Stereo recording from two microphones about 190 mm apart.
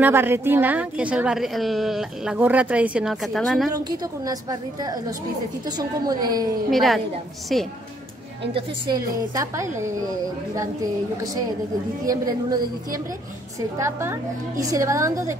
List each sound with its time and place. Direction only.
0.0 s a woman's voice: 10° right (ahead or behind)
5.8 s a woman's voice: 20° right (ahead or behind)
6.7 s a woman's voice: centre (ahead or behind)
8.5 s a woman's voice: 20° right (ahead or behind)
12.1 s a woman's voice: 20° right (ahead or behind)